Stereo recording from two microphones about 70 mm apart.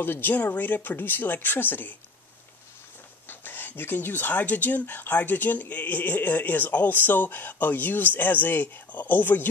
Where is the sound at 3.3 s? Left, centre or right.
Left.